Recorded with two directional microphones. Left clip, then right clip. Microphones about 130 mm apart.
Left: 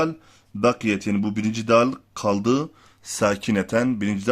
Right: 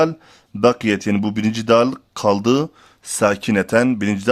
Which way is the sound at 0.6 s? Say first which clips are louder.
Right 5 dB; 40° right (ahead or behind).